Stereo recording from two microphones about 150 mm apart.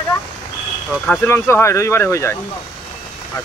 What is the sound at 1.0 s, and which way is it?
Speech, 10° left (ahead or behind).